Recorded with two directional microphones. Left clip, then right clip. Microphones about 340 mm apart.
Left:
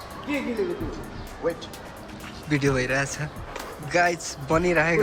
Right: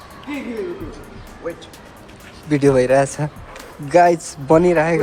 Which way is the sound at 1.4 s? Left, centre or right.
Left.